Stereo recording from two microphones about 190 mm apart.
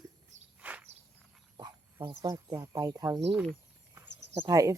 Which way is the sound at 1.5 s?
20° right (ahead or behind).